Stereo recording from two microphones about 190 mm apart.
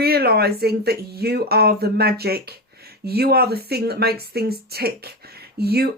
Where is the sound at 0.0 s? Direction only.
55° right (ahead or behind).